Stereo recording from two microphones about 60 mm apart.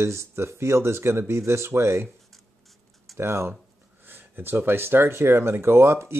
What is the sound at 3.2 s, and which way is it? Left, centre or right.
Speech, right.